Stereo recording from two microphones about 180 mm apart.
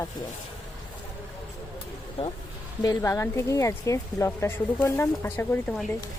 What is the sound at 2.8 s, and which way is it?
Speech, 20° left (ahead or behind).